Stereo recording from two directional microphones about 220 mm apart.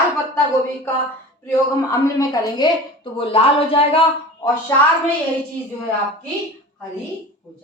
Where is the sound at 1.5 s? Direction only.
15° left (ahead or behind).